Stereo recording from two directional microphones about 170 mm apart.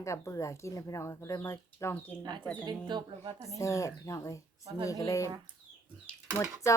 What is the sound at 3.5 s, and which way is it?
Speech, 15° left (ahead or behind).